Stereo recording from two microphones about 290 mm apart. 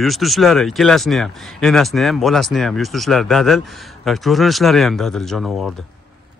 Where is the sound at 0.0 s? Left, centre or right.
Centre.